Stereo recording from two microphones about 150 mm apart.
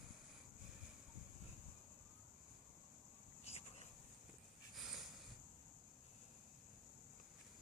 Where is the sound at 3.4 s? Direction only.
45° left (ahead or behind).